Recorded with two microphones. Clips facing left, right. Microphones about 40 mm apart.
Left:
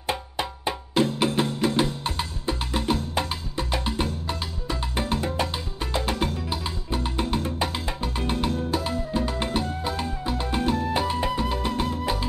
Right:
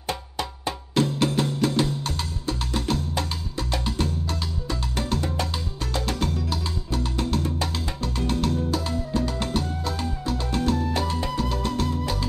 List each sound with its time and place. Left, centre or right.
0.0 s music: centre